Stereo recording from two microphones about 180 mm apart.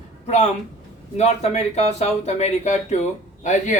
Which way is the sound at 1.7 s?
35° left (ahead or behind).